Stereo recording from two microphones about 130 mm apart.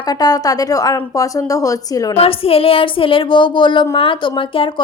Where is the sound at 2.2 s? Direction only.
45° left (ahead or behind).